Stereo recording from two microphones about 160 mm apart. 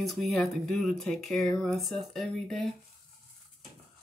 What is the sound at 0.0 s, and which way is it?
Speech, centre (ahead or behind).